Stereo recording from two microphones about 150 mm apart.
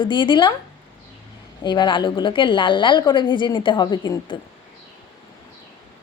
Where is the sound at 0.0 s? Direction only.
30° left (ahead or behind).